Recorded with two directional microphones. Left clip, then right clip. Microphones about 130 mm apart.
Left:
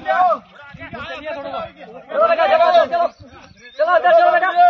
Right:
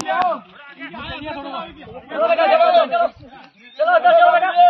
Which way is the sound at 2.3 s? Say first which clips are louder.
Right 1 dB; 30° left (ahead or behind).